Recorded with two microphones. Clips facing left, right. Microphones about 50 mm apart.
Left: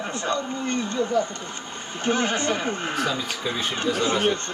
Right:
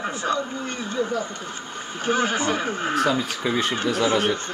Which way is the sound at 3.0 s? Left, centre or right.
Right.